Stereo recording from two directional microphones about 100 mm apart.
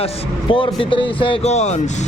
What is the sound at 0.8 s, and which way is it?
Speech, 60° left (ahead or behind).